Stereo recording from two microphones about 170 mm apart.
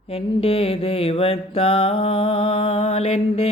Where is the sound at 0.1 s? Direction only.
35° left (ahead or behind).